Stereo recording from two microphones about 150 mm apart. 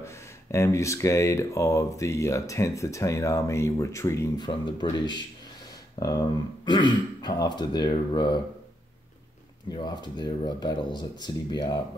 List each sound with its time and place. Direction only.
0.0 s speech: 20° left (ahead or behind)
4.5 s speech: 30° left (ahead or behind)
5.9 s speech: 25° left (ahead or behind)
9.7 s speech: 30° left (ahead or behind)